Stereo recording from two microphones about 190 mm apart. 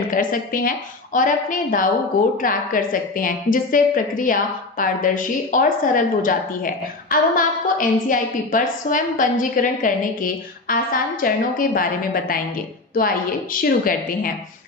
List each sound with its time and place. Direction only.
0.1 s a woman's voice: 45° left (ahead or behind)
13.5 s a woman's voice: 50° left (ahead or behind)